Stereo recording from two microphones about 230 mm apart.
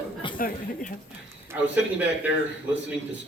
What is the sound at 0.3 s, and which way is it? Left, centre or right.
Speech, left.